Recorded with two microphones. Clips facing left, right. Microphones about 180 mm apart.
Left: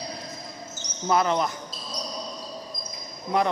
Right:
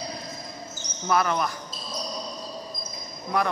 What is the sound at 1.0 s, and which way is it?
Speech, 20° left (ahead or behind).